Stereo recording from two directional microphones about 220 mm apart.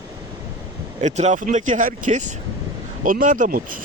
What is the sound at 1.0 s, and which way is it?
Speech, 30° right (ahead or behind).